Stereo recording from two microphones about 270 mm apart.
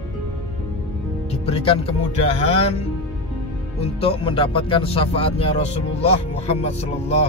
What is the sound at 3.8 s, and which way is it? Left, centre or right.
Speech, left.